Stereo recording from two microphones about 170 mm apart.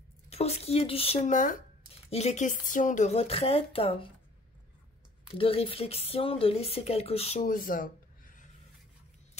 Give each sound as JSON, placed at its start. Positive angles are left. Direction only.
{"t": 0.3, "sound": "speech", "side_deg": 35}
{"t": 5.3, "sound": "speech", "side_deg": 35}
{"t": 7.4, "sound": "a sound", "side_deg": 55}